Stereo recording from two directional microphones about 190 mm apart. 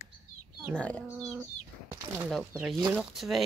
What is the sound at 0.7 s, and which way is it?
Speech, 5° left (ahead or behind).